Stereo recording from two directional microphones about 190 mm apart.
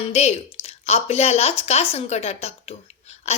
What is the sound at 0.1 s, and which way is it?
Speech, 35° left (ahead or behind).